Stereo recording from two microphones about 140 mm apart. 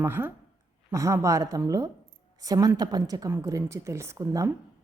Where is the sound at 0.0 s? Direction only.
15° right (ahead or behind).